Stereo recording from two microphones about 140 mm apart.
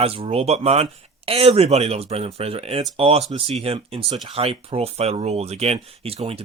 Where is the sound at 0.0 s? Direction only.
40° right (ahead or behind).